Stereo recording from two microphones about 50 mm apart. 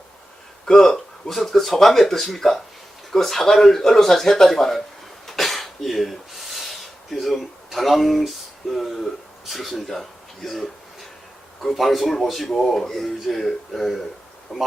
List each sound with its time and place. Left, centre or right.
0.6 s speech: centre
5.2 s snort: centre
9.5 s speech: centre